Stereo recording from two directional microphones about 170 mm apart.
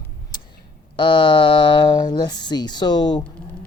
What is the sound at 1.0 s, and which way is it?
Speech, 30° left (ahead or behind).